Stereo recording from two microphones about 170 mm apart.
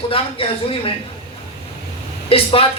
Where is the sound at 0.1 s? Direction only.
35° left (ahead or behind).